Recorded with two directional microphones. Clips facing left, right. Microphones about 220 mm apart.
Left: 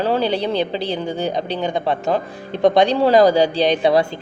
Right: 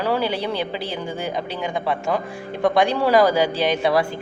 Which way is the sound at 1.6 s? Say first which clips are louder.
Left 4 dB; 25° left (ahead or behind).